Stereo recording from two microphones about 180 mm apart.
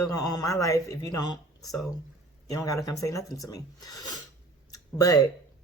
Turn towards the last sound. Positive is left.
turn(degrees=20)  # may be behind; listen again after turning